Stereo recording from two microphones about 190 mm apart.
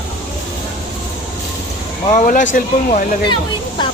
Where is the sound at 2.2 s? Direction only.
40° left (ahead or behind).